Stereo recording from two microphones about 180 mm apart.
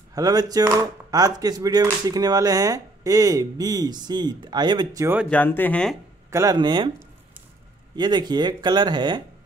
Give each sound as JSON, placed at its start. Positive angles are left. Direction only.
{"t": 0.1, "sound": "speech", "side_deg": -20}
{"t": 5.3, "sound": "speech", "side_deg": 10}
{"t": 6.3, "sound": "speech", "side_deg": -20}
{"t": 7.9, "sound": "speech", "side_deg": -25}